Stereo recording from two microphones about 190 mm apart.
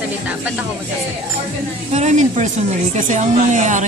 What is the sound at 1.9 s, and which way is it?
Speech, 35° right (ahead or behind).